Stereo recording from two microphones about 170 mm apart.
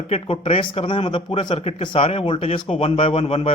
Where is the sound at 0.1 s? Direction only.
35° left (ahead or behind).